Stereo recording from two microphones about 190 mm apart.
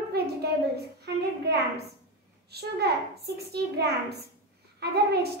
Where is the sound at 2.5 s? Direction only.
60° right (ahead or behind).